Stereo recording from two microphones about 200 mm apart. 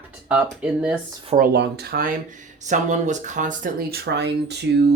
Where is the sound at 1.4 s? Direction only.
55° right (ahead or behind).